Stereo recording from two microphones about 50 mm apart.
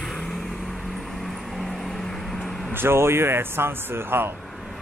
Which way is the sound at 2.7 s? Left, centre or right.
Right.